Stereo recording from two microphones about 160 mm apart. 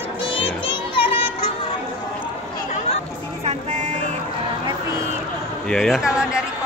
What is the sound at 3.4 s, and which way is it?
Vehicle, 45° right (ahead or behind).